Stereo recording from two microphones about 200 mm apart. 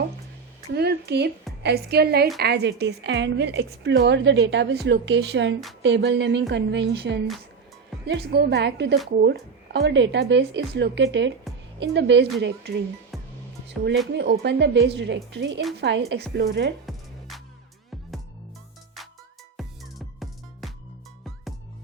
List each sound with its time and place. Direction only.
0.7 s a woman's voice: 55° right (ahead or behind)
16.8 s music: centre (ahead or behind)
19.5 s music: centre (ahead or behind)